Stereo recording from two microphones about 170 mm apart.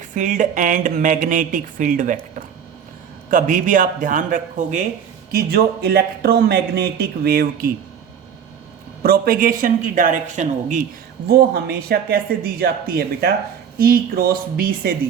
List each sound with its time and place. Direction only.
0.1 s speech: 50° right (ahead or behind)
3.2 s speech: 50° right (ahead or behind)
5.3 s speech: 60° right (ahead or behind)
9.0 s speech: 60° right (ahead or behind)
11.3 s speech: 65° right (ahead or behind)